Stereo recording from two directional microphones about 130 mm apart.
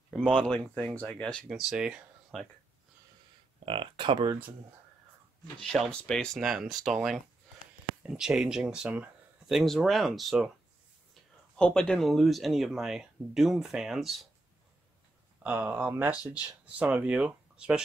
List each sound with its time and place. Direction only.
0.1 s speech: 5° left (ahead or behind)
1.5 s speech: 5° right (ahead or behind)
3.6 s speech: 40° right (ahead or behind)
5.6 s speech: centre (ahead or behind)
11.5 s speech: 5° left (ahead or behind)
15.5 s speech: 15° right (ahead or behind)